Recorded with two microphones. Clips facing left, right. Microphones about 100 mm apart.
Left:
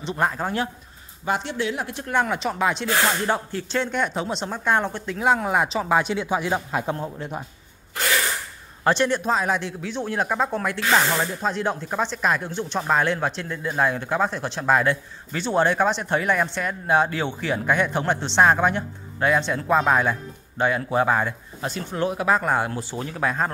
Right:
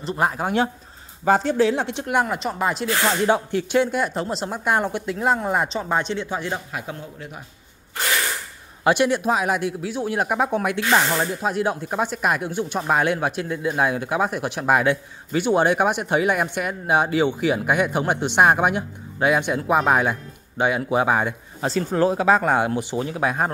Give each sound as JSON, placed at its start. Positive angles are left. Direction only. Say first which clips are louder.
{"t": 0.0, "sound": "speech", "louder": "right 1 dB", "side_deg": 0}
{"t": 0.4, "sound": "speech", "louder": "right 4 dB", "side_deg": -15}
{"t": 1.2, "sound": "speech", "louder": "right 7 dB", "side_deg": -40}
{"t": 2.1, "sound": "speech", "louder": "even", "side_deg": 0}
{"t": 3.3, "sound": "speech", "louder": "right 5 dB", "side_deg": -15}
{"t": 4.5, "sound": "speech", "louder": "even", "side_deg": -10}
{"t": 6.5, "sound": "a man's voice", "louder": "left 5 dB", "side_deg": 35}
{"t": 8.8, "sound": "speech", "louder": "right 2 dB", "side_deg": -10}
{"t": 21.9, "sound": "speech", "louder": "right 4 dB", "side_deg": -30}